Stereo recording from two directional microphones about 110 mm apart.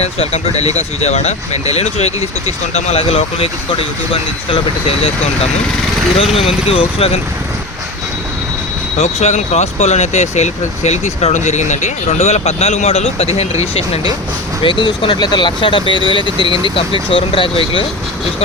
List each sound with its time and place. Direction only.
0.0 s speech: 70° left (ahead or behind)
6.3 s speech: 65° left (ahead or behind)
9.0 s speech: 90° left; by 14.1 s 60° left (ahead or behind)
14.6 s speech: 50° left (ahead or behind)